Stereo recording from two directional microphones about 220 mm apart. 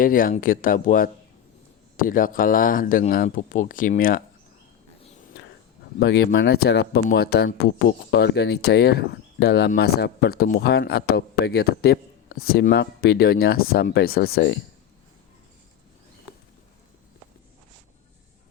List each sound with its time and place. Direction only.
0.0 s speech: 40° left (ahead or behind)
6.0 s speech: 50° left (ahead or behind)